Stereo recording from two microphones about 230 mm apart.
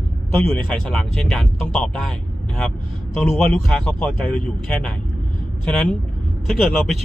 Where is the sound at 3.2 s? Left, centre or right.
Centre.